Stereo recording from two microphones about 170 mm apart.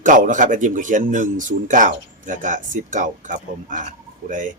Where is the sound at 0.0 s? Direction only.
50° right (ahead or behind).